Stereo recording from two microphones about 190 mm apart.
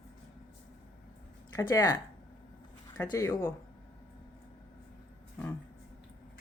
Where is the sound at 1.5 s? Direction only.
15° left (ahead or behind).